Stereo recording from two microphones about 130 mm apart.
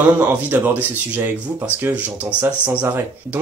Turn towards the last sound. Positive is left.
turn(degrees=-15)  # may be behind; listen again after turning